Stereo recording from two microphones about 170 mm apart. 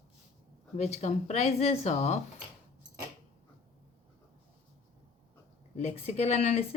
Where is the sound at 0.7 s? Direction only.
40° left (ahead or behind).